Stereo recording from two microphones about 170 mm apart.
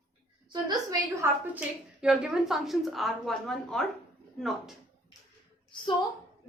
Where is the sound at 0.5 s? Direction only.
20° right (ahead or behind).